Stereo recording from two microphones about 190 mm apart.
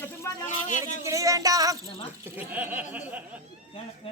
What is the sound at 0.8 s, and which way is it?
Speech, 15° right (ahead or behind).